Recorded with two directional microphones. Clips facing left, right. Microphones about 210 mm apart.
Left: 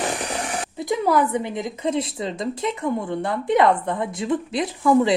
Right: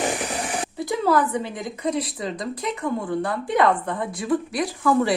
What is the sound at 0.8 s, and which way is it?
A woman's voice, 20° left (ahead or behind).